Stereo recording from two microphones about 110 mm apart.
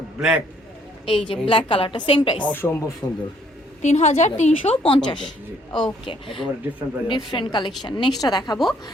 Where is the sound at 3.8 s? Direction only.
90° left; by 5.0 s 60° left (ahead or behind).